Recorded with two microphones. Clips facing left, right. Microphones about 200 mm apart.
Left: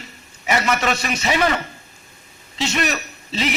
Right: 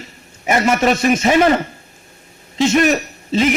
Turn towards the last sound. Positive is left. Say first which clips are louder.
# right 8 dB
turn(degrees=-50)  # may be behind; listen again after turning